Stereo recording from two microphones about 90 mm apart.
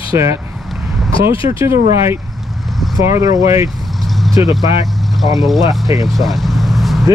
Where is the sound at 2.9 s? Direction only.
40° right (ahead or behind).